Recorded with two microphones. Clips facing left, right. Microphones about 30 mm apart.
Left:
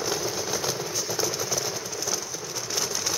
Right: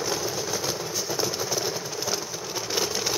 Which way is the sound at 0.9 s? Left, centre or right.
Centre.